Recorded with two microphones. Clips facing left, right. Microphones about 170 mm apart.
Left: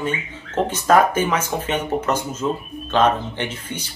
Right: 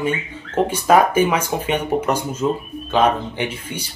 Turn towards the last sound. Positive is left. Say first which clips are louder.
# right 2 dB
turn(degrees=-10)  # may be behind; listen again after turning